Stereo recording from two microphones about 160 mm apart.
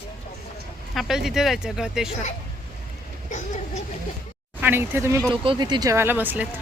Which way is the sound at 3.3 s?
50° left (ahead or behind).